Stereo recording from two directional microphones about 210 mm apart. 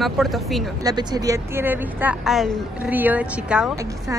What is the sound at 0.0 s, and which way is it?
Speech, centre (ahead or behind).